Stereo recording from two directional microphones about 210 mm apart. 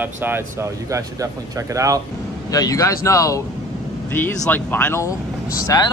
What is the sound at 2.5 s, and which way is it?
Speech, 15° left (ahead or behind).